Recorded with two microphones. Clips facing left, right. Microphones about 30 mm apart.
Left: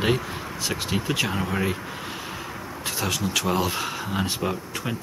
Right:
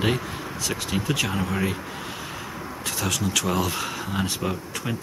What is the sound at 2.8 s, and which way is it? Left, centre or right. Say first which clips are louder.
Speech: even; centre.